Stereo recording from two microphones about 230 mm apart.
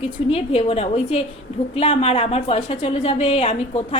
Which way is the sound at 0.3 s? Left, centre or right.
Left.